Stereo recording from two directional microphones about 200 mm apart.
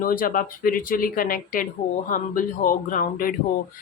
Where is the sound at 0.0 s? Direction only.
45° left (ahead or behind).